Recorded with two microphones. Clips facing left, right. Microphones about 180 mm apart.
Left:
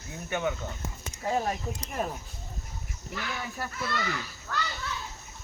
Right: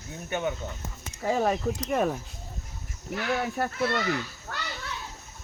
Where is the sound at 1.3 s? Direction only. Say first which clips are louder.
Right 5 dB; 85° right.